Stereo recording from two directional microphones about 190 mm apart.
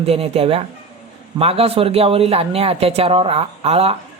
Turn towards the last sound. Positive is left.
turn(degrees=-30)  # may be behind; listen again after turning